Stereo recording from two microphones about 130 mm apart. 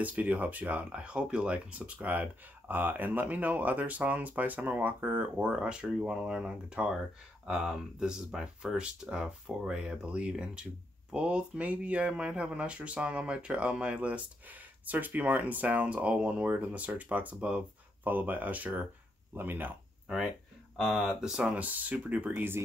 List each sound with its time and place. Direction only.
0.0 s speech: 10° right (ahead or behind)
20.7 s speech: centre (ahead or behind)